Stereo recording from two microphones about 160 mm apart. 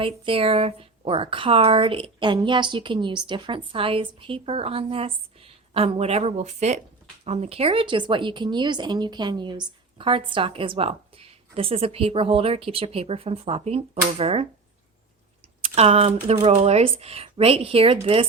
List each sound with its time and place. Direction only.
0.0 s a woman's voice: 35° right (ahead or behind)
15.6 s a woman's voice: 40° right (ahead or behind)